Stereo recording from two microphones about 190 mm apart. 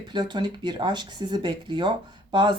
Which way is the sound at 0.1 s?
25° right (ahead or behind).